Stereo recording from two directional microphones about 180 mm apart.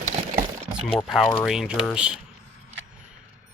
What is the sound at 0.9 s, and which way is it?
Speech, centre (ahead or behind).